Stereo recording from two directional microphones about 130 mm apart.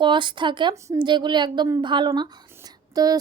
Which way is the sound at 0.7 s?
25° right (ahead or behind).